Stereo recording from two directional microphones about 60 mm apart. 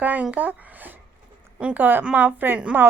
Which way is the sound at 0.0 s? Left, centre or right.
Right.